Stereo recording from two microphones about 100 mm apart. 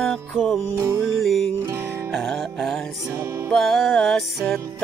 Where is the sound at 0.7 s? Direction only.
35° right (ahead or behind).